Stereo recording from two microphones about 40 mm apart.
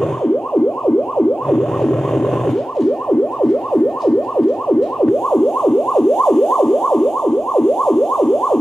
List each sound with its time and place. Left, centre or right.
1.5 s emergency vehicle: centre
3.1 s emergency vehicle: centre
5.3 s emergency vehicle: centre